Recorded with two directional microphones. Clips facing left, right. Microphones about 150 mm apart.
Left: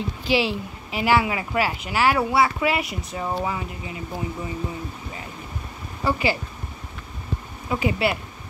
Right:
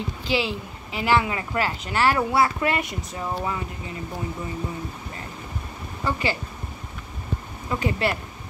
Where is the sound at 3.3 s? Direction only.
15° left (ahead or behind).